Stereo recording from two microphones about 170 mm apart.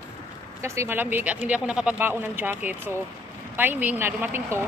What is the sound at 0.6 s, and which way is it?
Speech, 15° right (ahead or behind).